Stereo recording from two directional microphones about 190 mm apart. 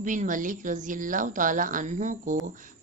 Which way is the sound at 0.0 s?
40° right (ahead or behind).